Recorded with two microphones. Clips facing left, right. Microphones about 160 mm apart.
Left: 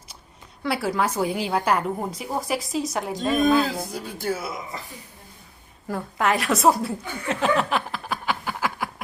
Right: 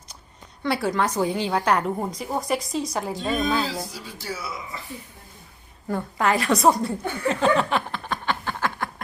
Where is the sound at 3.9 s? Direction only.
55° left (ahead or behind).